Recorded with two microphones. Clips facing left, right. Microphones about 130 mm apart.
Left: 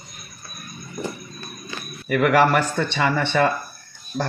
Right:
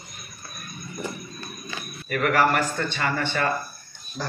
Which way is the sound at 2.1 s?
80° left.